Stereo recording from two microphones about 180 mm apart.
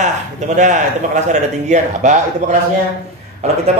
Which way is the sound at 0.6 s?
40° right (ahead or behind).